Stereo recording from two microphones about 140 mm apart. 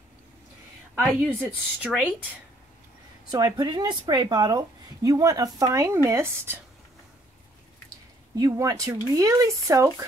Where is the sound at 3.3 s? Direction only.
25° right (ahead or behind).